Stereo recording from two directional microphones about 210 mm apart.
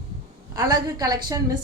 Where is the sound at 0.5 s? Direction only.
20° right (ahead or behind).